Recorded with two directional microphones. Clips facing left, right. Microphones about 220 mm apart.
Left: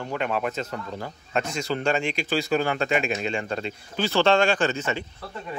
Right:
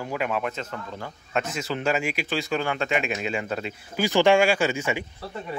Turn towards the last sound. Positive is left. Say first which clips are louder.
# right 1 dB
turn(degrees=-10)  # may be behind; listen again after turning